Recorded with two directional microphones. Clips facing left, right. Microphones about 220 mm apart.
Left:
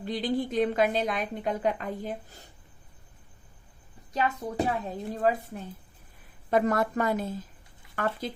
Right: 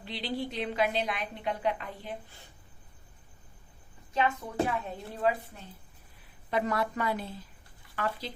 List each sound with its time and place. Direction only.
0.0 s a woman's voice: 45° left (ahead or behind)
4.1 s speech: 35° left (ahead or behind)
6.5 s a woman's voice: 45° left (ahead or behind)